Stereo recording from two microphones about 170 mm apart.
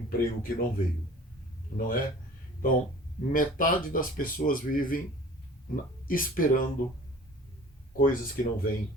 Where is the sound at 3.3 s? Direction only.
55° left (ahead or behind).